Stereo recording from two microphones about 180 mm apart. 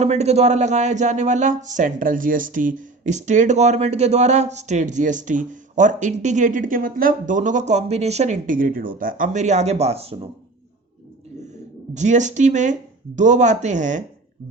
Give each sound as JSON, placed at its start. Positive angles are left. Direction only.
{"t": 0.0, "sound": "speech", "side_deg": -40}
{"t": 11.9, "sound": "speech", "side_deg": -40}